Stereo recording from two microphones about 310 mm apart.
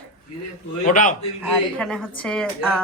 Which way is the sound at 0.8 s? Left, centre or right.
Left.